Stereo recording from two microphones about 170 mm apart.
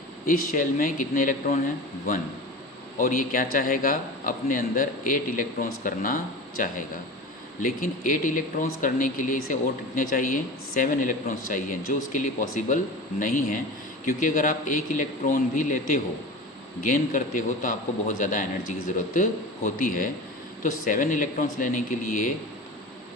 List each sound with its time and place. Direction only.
0.3 s speech: 55° left (ahead or behind)
3.0 s speech: 55° left (ahead or behind)